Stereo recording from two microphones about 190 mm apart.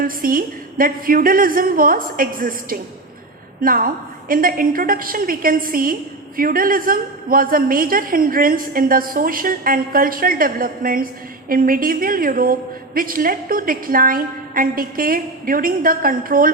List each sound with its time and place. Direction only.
0.0 s a woman's voice: 50° right (ahead or behind)